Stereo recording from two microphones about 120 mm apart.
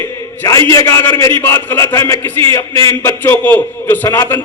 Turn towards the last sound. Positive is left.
turn(degrees=30)  # may be behind; listen again after turning